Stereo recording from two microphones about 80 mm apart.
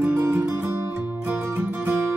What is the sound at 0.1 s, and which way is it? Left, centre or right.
Music, right.